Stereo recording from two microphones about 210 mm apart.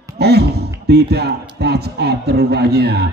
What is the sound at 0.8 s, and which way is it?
A man's voice, 50° right (ahead or behind).